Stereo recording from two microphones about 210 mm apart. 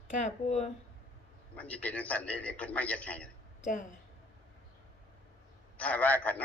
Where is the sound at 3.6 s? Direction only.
35° left (ahead or behind).